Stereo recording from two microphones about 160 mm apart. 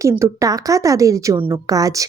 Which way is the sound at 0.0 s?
20° right (ahead or behind).